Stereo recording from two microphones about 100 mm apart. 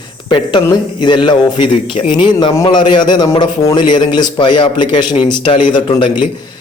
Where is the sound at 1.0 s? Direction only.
50° left (ahead or behind).